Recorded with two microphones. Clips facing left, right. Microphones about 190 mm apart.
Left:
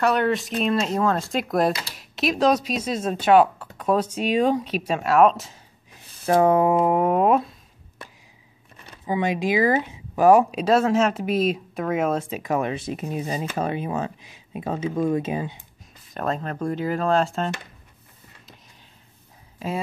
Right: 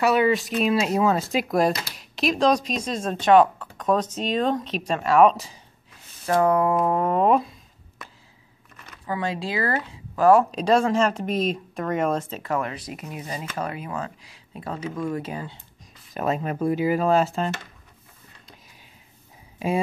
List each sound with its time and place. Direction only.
0.0 s speech: 5° right (ahead or behind)
6.2 s speech: 20° left (ahead or behind); by 7.5 s centre (ahead or behind)
8.7 s a sound: 30° left (ahead or behind)
9.1 s speech: 20° left (ahead or behind)
10.6 s speech: 5° left (ahead or behind)
16.1 s speech: 5° right (ahead or behind)